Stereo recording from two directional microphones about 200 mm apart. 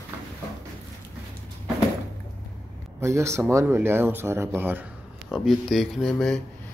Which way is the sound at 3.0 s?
15° right (ahead or behind).